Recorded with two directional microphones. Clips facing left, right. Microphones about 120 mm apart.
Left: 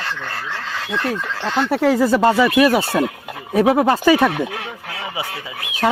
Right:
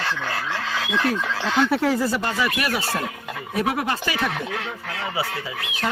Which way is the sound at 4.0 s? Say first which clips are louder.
Left 11 dB; 55° left (ahead or behind).